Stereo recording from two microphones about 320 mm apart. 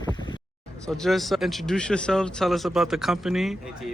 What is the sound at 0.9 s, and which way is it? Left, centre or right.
Speech, centre.